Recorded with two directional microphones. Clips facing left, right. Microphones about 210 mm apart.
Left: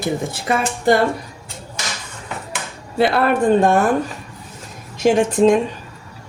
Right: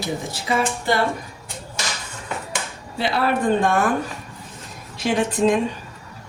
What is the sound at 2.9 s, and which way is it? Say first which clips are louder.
Speech: left 5 dB; 55° left (ahead or behind).